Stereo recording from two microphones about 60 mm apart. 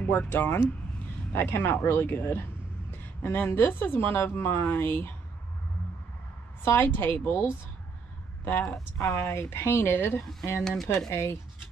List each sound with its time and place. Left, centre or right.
0.1 s a woman's voice: left
6.6 s a woman's voice: left
9.0 s a woman's voice: left
10.8 s speech: centre
11.1 s speech: left